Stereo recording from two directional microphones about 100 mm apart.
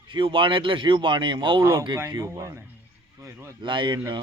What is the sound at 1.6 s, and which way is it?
Speech, 25° right (ahead or behind).